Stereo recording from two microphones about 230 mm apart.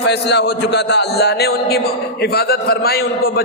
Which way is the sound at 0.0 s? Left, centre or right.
Left.